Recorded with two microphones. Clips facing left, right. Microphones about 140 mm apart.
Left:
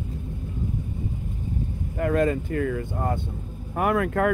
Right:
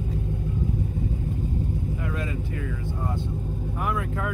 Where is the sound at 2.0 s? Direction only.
50° left (ahead or behind).